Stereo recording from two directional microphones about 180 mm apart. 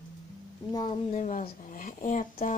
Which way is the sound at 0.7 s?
25° left (ahead or behind).